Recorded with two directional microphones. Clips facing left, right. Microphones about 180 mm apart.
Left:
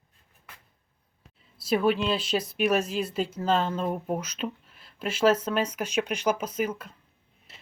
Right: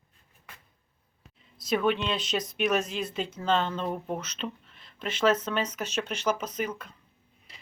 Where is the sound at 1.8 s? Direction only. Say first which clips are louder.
Left 4 dB; 5° left (ahead or behind).